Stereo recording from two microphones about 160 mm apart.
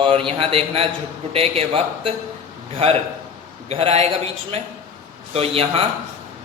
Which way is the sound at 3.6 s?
40° right (ahead or behind).